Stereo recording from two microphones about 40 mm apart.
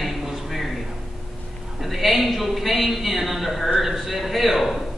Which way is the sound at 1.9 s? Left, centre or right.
Centre.